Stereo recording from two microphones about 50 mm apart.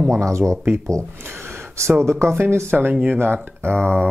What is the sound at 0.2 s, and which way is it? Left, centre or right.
Speech, right.